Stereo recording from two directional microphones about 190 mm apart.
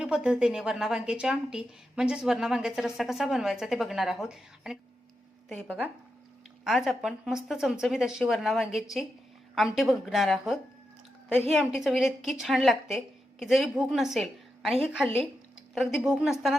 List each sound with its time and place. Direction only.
0.0 s a woman's voice: 5° right (ahead or behind)